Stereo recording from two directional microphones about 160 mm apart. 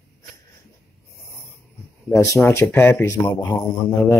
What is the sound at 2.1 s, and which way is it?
Speech, 15° left (ahead or behind).